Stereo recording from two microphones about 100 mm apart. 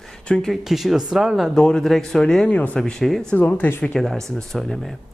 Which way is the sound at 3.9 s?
5° left (ahead or behind).